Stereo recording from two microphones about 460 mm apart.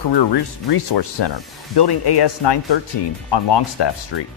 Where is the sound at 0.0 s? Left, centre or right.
Left.